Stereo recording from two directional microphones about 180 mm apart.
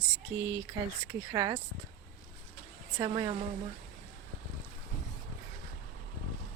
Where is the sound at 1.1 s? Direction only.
20° right (ahead or behind).